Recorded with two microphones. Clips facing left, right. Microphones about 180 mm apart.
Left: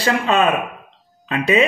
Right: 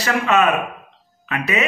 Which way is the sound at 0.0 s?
30° left (ahead or behind).